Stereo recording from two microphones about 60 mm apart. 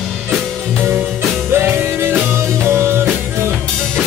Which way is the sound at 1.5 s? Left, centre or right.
Right.